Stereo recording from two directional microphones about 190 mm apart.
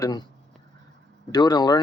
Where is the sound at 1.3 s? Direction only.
20° left (ahead or behind).